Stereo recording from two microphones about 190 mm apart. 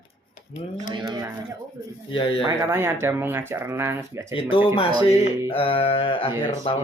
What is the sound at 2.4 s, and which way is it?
Speech, 15° right (ahead or behind).